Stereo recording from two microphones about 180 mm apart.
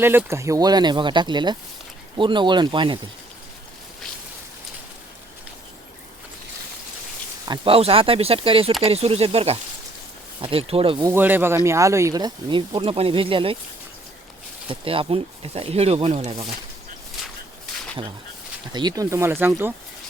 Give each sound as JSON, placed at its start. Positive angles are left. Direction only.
{"t": 0.0, "sound": "speech", "side_deg": -10}
{"t": 7.4, "sound": "speech", "side_deg": -25}
{"t": 11.1, "sound": "speech", "side_deg": -10}
{"t": 14.7, "sound": "speech", "side_deg": -30}
{"t": 18.7, "sound": "speech", "side_deg": -25}